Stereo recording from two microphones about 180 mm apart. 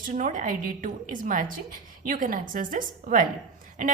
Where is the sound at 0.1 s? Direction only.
45° right (ahead or behind).